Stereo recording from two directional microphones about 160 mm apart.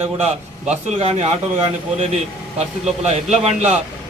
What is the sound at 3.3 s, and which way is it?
Speech, 45° right (ahead or behind).